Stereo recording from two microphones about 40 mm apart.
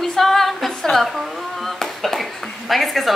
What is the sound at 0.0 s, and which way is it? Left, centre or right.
Music, centre.